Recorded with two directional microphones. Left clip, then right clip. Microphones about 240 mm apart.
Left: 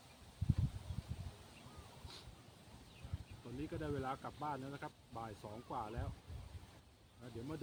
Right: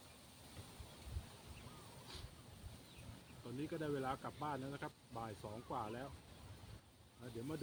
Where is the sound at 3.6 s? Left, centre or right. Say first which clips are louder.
Right 1 dB; centre.